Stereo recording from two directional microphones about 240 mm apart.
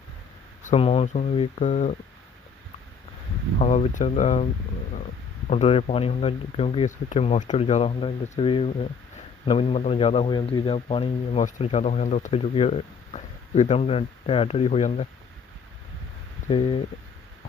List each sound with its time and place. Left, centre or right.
0.6 s speech: left
3.6 s speech: left
5.5 s speech: left
16.5 s speech: left